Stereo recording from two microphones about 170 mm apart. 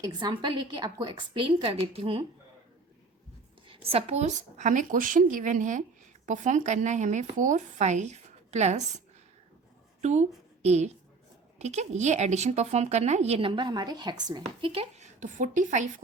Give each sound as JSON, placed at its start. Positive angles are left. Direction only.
{"t": 0.0, "sound": "a woman's voice", "side_deg": -25}
{"t": 3.7, "sound": "speech", "side_deg": -35}
{"t": 10.0, "sound": "a woman's voice", "side_deg": -40}